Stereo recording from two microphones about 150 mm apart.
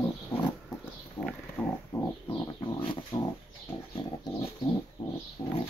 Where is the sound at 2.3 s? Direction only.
30° left (ahead or behind).